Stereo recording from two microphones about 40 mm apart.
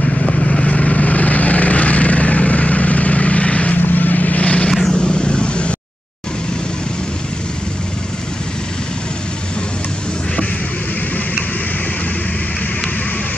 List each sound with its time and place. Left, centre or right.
0.0 s vehicle: left
0.7 s vehicle: left
3.7 s vehicle: left
4.9 s vehicle: left